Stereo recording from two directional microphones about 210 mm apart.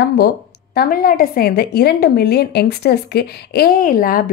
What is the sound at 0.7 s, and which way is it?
A woman's voice, 45° left (ahead or behind).